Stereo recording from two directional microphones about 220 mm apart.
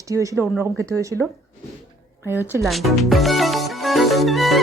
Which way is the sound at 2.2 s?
10° right (ahead or behind).